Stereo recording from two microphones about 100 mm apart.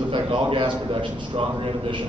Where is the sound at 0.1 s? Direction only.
60° right (ahead or behind).